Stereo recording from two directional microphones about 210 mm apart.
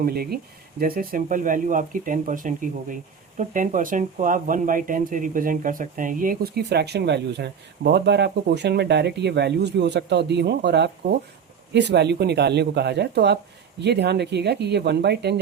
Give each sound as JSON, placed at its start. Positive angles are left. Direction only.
{"t": 0.0, "sound": "speech", "side_deg": -45}